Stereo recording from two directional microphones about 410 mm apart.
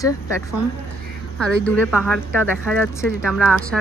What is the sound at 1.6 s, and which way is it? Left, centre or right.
Speech, centre.